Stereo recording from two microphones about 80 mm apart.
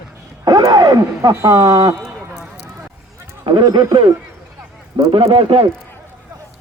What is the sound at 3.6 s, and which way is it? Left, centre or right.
Speech, right.